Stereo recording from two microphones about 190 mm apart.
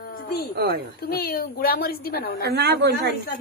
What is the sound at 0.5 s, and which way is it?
Speech, 60° right (ahead or behind).